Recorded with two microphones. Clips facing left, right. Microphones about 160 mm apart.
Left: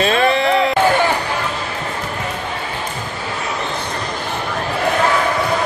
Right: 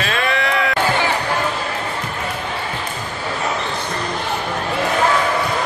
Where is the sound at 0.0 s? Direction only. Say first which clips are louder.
Left 6 dB; 30° left (ahead or behind).